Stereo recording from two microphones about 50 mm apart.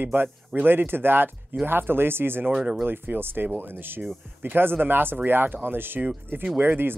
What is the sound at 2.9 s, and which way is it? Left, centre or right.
Speech, right.